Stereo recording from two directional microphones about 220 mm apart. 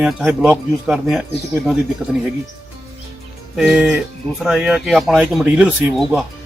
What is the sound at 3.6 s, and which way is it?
Speech, centre (ahead or behind).